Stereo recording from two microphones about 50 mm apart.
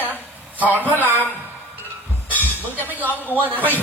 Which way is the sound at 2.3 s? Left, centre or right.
Left.